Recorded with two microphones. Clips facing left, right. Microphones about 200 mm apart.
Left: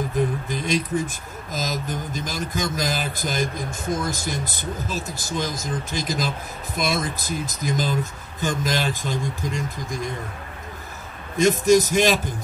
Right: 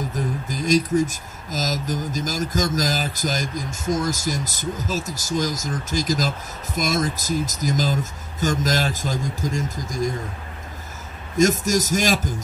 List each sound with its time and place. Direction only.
0.5 s speech: 40° right (ahead or behind)
11.3 s speech: 45° right (ahead or behind)